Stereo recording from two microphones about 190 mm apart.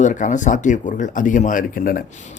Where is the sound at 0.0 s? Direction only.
40° left (ahead or behind).